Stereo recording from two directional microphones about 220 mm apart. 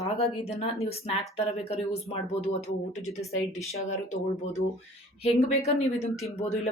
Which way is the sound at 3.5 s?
30° left (ahead or behind).